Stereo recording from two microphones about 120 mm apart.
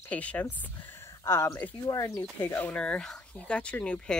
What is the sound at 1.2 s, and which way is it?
Speech, 25° left (ahead or behind).